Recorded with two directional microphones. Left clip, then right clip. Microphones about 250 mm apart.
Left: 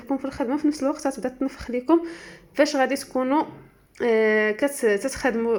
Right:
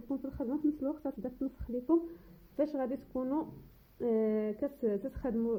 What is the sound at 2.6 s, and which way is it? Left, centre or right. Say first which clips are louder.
Speech: left 13 dB; centre.